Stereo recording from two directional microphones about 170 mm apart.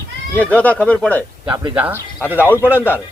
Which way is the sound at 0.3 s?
10° left (ahead or behind).